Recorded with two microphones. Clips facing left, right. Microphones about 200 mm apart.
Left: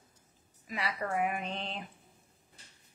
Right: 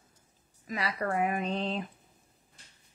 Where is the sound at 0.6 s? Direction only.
40° right (ahead or behind).